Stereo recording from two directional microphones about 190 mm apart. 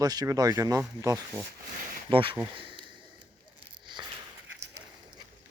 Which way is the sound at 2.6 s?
25° right (ahead or behind).